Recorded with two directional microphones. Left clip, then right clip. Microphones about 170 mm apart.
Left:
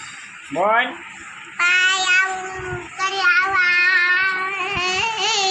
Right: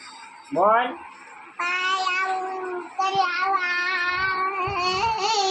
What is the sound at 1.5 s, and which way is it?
Child singing, 10° left (ahead or behind).